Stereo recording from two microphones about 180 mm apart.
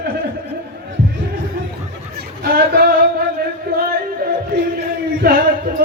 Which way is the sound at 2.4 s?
55° right (ahead or behind).